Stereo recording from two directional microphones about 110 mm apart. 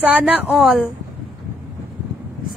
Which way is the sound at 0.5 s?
5° right (ahead or behind).